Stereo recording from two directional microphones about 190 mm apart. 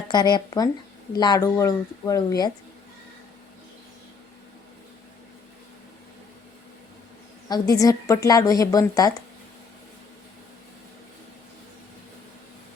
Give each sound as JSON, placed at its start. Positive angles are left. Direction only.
{"t": 0.1, "sound": "a woman's voice", "side_deg": 20}
{"t": 7.4, "sound": "a woman's voice", "side_deg": 20}